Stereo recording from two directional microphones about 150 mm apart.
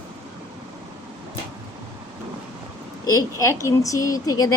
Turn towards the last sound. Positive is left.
turn(degrees=25)  # may be behind; listen again after turning